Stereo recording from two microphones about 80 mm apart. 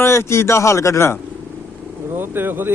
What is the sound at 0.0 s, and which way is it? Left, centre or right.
A man's voice, left.